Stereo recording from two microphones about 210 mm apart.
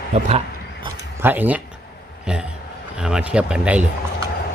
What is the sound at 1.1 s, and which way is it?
Speech, 10° right (ahead or behind).